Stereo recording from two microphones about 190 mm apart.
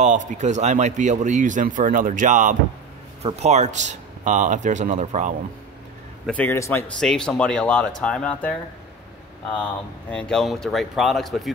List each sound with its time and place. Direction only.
0.0 s speech: 40° right (ahead or behind)
6.2 s a man's voice: 10° left (ahead or behind)
10.1 s speech: 5° left (ahead or behind)